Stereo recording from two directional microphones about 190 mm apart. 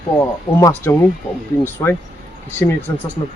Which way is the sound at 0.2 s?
15° left (ahead or behind).